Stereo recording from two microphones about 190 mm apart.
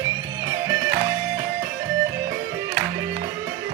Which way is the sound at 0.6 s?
15° right (ahead or behind).